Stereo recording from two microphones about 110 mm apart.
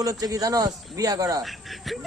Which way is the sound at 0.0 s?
35° right (ahead or behind).